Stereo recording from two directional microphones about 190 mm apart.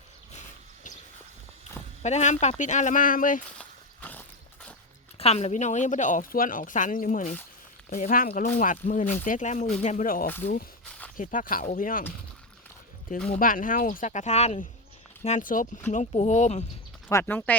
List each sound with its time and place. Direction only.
2.0 s speech: 35° left (ahead or behind)
3.6 s a sound: 10° left (ahead or behind)
5.1 s speech: 35° left (ahead or behind)
13.3 s speech: 45° left (ahead or behind)
17.1 s speech: 15° left (ahead or behind)